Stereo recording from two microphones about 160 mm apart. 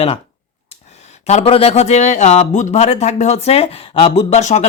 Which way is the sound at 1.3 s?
40° left (ahead or behind).